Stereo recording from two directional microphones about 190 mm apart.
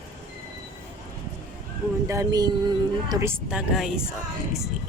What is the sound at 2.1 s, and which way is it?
A woman's voice, 20° right (ahead or behind).